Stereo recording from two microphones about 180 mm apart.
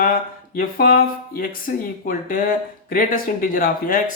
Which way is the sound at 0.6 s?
55° left (ahead or behind).